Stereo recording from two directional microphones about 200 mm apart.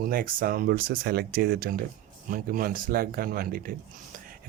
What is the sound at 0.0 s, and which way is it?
Speech, 45° right (ahead or behind).